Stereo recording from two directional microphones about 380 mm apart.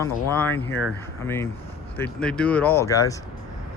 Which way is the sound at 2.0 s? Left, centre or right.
Centre.